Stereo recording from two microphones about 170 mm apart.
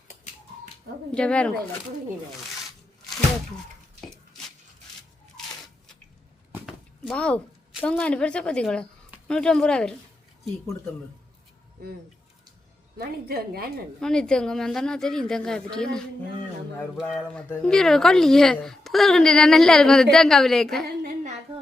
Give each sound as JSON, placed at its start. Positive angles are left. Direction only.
{"t": 1.1, "sound": "speech", "side_deg": 5}
{"t": 7.1, "sound": "a woman's voice", "side_deg": 5}
{"t": 13.0, "sound": "a woman's voice", "side_deg": -65}
{"t": 14.0, "sound": "speech", "side_deg": 5}